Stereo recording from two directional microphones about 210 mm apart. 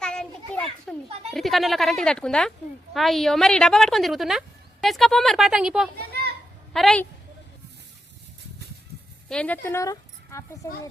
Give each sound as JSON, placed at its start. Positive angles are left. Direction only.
{"t": 0.0, "sound": "children playing", "side_deg": 5}
{"t": 0.9, "sound": "a sound", "side_deg": 0}
{"t": 1.3, "sound": "speech", "side_deg": 0}
{"t": 6.0, "sound": "children playing", "side_deg": -50}
{"t": 6.7, "sound": "speech", "side_deg": 5}
{"t": 9.3, "sound": "speech", "side_deg": 5}